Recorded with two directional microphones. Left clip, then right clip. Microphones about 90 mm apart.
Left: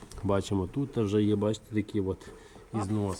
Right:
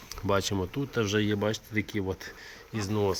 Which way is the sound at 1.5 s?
60° right (ahead or behind).